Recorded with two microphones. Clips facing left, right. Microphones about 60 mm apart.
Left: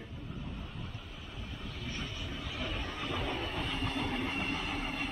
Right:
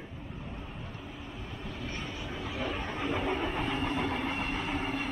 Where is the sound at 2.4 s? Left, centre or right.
Centre.